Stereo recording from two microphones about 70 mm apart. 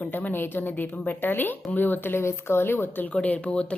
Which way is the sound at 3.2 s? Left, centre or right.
Left.